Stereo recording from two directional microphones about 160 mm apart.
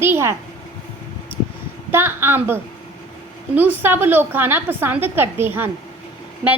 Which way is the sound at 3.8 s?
15° right (ahead or behind).